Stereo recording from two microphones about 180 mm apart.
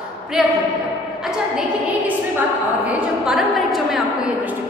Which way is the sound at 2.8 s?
5° right (ahead or behind).